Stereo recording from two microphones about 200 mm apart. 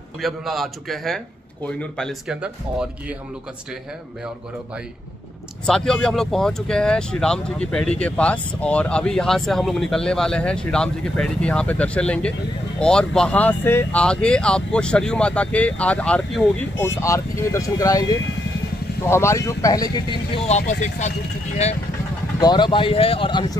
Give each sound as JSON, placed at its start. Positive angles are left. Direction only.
{"t": 0.2, "sound": "speech", "side_deg": 0}
{"t": 5.7, "sound": "speech", "side_deg": 5}
{"t": 19.0, "sound": "speech", "side_deg": 15}
{"t": 22.4, "sound": "speech", "side_deg": 20}